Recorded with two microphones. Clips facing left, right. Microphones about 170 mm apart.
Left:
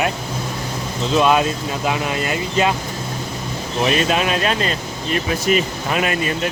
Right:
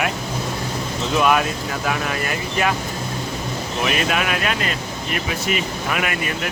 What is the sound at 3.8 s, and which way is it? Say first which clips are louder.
Speech: left 4 dB; 30° left (ahead or behind).